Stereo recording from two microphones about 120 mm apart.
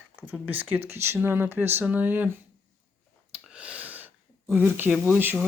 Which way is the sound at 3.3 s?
10° right (ahead or behind).